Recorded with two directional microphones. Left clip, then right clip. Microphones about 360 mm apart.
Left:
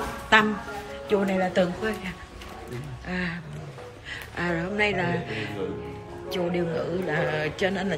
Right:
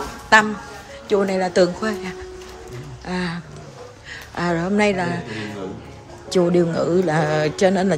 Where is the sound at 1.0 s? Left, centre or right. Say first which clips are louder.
Right 5 dB; centre.